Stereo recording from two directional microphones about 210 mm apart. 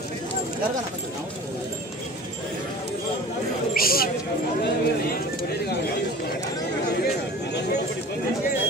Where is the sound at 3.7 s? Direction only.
45° left (ahead or behind).